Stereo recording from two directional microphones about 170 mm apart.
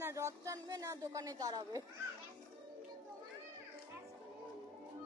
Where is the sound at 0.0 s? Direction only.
15° right (ahead or behind).